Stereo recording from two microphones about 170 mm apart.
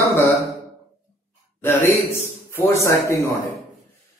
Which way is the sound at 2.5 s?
15° left (ahead or behind).